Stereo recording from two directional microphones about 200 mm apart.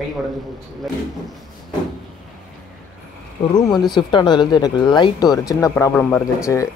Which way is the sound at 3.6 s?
Centre (ahead or behind).